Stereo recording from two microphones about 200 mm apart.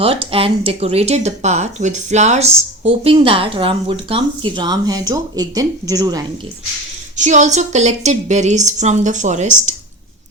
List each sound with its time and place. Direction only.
0.0 s speech: 25° right (ahead or behind)
7.2 s a woman's voice: 35° right (ahead or behind)